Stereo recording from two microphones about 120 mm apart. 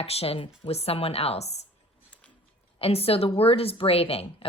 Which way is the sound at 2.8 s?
55° left (ahead or behind).